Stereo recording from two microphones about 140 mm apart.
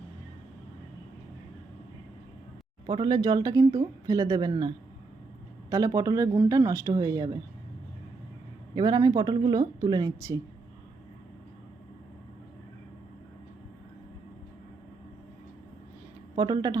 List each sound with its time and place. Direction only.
2.8 s speech: 30° right (ahead or behind)
5.7 s speech: 25° right (ahead or behind)
8.7 s speech: 30° right (ahead or behind)
16.3 s speech: 30° right (ahead or behind)